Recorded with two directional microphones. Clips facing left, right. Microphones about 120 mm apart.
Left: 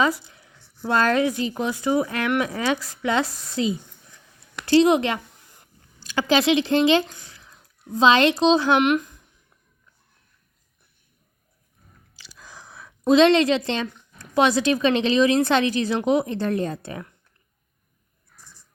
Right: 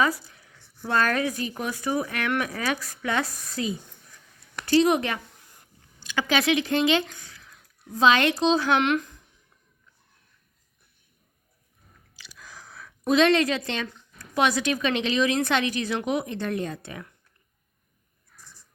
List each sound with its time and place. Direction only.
0.0 s speech: 25° left (ahead or behind)
8.8 s speech: 15° left (ahead or behind)
12.1 s a sound: 30° left (ahead or behind)
14.2 s speech: 30° left (ahead or behind)